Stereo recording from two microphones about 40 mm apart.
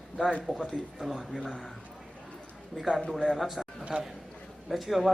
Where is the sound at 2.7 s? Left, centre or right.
Centre.